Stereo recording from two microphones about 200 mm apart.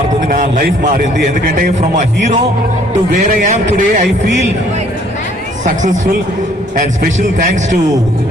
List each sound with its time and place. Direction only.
0.3 s a man's voice: 40° right (ahead or behind)
5.6 s speech: 40° right (ahead or behind)
7.3 s speech: 40° right (ahead or behind)